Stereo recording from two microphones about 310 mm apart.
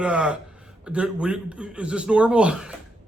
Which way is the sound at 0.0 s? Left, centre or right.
Centre.